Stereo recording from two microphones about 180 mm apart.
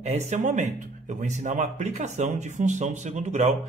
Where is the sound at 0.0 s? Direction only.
40° right (ahead or behind).